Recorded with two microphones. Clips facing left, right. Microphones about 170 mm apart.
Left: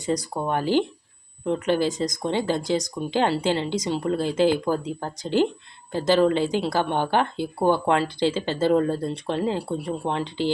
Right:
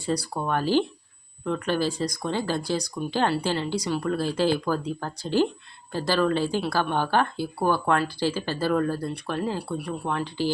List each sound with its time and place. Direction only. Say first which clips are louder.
0.0 s speech: left 2 dB; 20° left (ahead or behind)